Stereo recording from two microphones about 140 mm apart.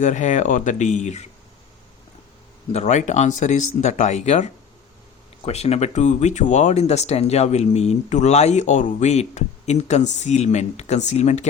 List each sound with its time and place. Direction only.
0.0 s speech: 60° left (ahead or behind)
2.7 s speech: 55° left (ahead or behind)
5.5 s speech: 50° left (ahead or behind)